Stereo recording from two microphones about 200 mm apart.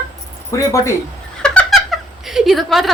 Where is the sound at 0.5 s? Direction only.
15° left (ahead or behind).